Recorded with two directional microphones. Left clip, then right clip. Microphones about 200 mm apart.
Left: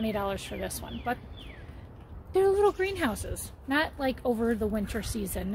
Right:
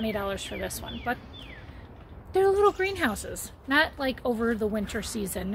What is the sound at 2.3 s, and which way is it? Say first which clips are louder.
A woman's voice: right 2 dB; 5° left (ahead or behind).